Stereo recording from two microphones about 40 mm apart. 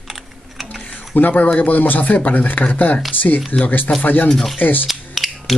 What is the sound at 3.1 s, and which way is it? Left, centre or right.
Speech, left.